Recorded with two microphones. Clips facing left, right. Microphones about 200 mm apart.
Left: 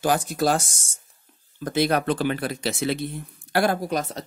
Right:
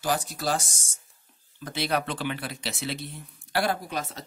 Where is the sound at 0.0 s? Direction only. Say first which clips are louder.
Left 6 dB; 50° left (ahead or behind).